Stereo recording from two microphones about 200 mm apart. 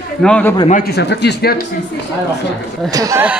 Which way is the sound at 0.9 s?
55° left (ahead or behind).